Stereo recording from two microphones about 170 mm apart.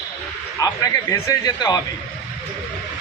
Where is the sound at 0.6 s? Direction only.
20° left (ahead or behind).